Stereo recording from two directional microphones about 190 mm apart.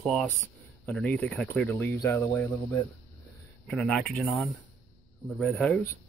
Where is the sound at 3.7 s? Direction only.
5° left (ahead or behind).